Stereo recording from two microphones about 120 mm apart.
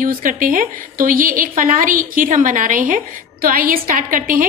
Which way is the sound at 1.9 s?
90° right.